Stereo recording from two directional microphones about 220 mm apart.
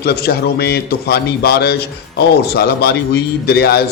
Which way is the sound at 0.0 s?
45° left (ahead or behind).